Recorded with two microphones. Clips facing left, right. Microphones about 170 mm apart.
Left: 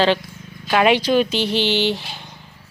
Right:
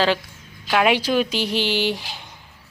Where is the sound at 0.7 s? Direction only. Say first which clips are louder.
Left 3 dB; 5° right (ahead or behind).